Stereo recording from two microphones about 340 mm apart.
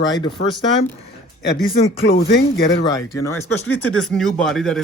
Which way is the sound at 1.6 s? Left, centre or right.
Left.